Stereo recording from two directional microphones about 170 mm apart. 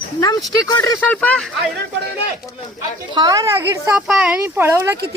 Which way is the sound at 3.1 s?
25° right (ahead or behind).